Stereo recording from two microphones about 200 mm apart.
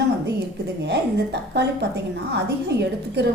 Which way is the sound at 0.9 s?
60° right (ahead or behind).